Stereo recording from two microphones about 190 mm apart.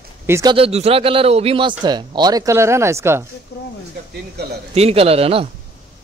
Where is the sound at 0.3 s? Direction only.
20° right (ahead or behind).